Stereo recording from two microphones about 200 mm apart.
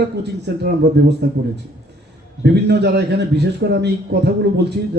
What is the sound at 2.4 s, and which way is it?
A man's voice, 55° right (ahead or behind).